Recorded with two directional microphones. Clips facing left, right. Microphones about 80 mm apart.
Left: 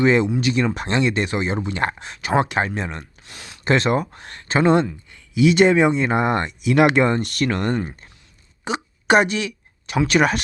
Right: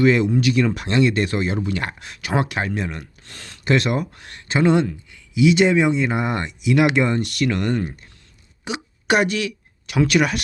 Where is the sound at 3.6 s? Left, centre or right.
Left.